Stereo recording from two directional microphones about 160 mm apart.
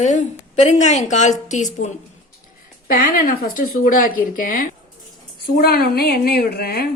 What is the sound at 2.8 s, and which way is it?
Speech, 60° left (ahead or behind).